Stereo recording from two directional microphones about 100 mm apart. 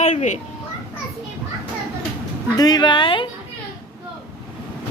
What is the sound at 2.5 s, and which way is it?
Speech, 40° left (ahead or behind).